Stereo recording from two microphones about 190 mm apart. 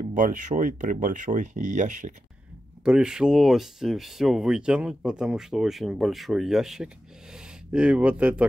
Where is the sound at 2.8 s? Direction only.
5° right (ahead or behind).